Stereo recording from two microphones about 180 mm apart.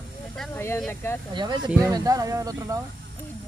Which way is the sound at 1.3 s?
25° right (ahead or behind).